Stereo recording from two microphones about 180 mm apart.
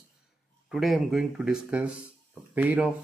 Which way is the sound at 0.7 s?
Centre (ahead or behind).